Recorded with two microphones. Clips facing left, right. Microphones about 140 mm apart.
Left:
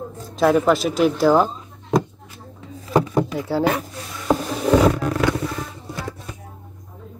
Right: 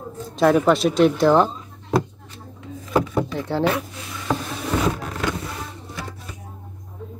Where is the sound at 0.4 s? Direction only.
Centre (ahead or behind).